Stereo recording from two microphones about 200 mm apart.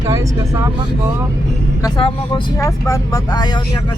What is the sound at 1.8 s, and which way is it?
Speech, 20° left (ahead or behind).